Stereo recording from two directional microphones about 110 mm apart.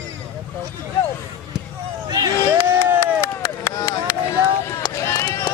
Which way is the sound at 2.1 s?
35° right (ahead or behind).